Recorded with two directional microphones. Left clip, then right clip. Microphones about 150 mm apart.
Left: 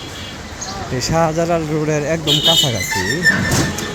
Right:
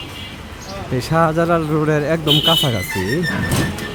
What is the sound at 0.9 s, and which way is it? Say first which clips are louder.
Speech: even; 30° right (ahead or behind).